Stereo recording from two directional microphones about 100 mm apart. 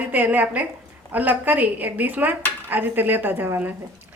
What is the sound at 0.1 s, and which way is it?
A woman's voice, 20° right (ahead or behind).